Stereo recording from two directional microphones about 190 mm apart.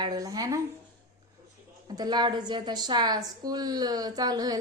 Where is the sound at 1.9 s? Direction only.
20° right (ahead or behind).